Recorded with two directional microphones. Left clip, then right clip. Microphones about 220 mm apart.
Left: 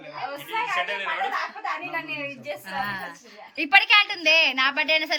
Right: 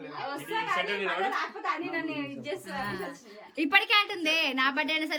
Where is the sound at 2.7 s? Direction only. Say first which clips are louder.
Left 8 dB; 10° right (ahead or behind).